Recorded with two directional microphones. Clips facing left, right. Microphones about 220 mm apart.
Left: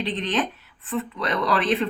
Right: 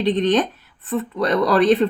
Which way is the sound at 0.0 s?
40° right (ahead or behind).